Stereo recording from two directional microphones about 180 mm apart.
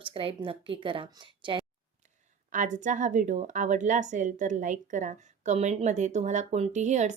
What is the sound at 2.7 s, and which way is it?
A woman's voice, 45° right (ahead or behind).